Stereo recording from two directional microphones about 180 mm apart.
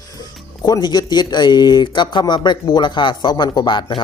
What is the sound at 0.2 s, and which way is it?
Speech, 20° left (ahead or behind).